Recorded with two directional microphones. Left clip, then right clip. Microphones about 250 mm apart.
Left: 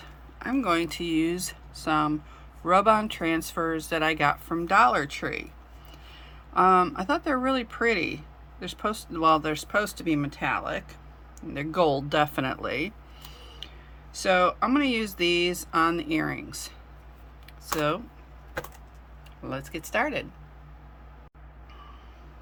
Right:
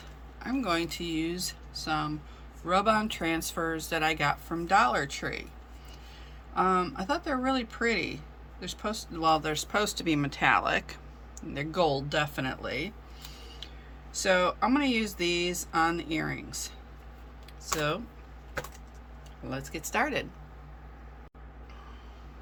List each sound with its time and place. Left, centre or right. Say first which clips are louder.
0.3 s speech: left 4 dB; centre
6.5 s speech: left 7 dB; centre
11.3 s speech: left 4 dB; centre
14.1 s speech: left 3 dB; centre
17.7 s speech: left 4 dB; centre
19.5 s speech: left 3 dB; centre